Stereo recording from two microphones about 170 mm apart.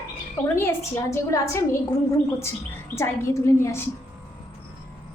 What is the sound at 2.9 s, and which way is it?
Speech, 15° left (ahead or behind).